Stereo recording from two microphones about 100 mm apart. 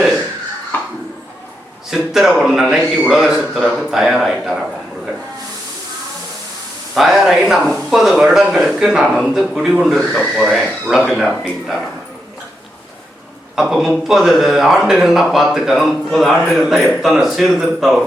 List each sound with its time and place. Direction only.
0.7 s a sound: 20° left (ahead or behind)
1.9 s speech: 5° right (ahead or behind)
6.9 s speech: 5° right (ahead or behind)
13.6 s speech: 5° right (ahead or behind)